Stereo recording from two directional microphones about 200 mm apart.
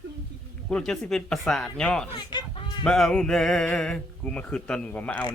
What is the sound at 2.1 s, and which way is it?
Speech, 20° left (ahead or behind).